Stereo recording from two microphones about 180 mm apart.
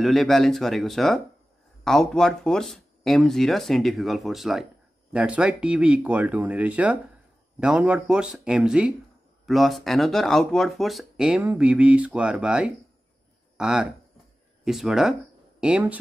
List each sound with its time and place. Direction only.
0.0 s speech: centre (ahead or behind)